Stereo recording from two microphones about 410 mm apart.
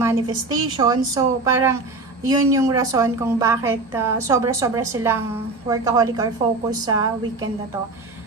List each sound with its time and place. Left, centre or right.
0.0 s a woman's voice: centre